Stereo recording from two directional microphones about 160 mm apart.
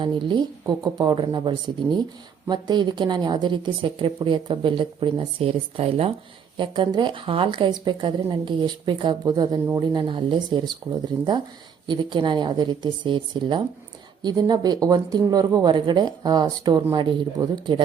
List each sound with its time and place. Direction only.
0.0 s a woman's voice: 30° right (ahead or behind)
11.9 s speech: 30° right (ahead or behind)